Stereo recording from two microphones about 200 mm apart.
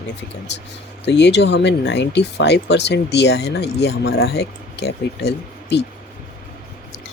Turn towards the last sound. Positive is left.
turn(degrees=55)  # may be behind; listen again after turning